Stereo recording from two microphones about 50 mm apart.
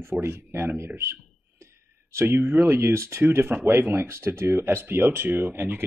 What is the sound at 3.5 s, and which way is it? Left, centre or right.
Speech, right.